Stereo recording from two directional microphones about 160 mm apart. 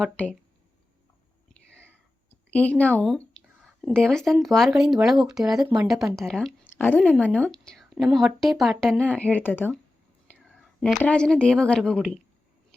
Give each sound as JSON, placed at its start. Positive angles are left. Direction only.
{"t": 0.0, "sound": "a woman's voice", "side_deg": 10}
{"t": 2.5, "sound": "a woman's voice", "side_deg": 10}